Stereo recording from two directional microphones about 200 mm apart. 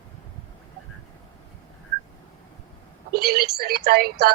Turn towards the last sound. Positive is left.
turn(degrees=-50)  # may be behind; listen again after turning